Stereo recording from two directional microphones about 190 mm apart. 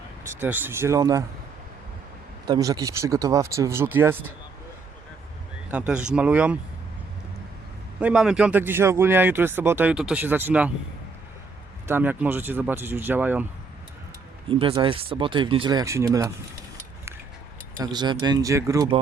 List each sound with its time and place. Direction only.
0.3 s speech: 10° right (ahead or behind)
2.5 s speech: 20° right (ahead or behind)
5.7 s speech: 5° right (ahead or behind)
7.9 s speech: 5° right (ahead or behind)
11.9 s speech: 10° right (ahead or behind)
14.5 s speech: 30° right (ahead or behind)
17.7 s speech: 25° right (ahead or behind)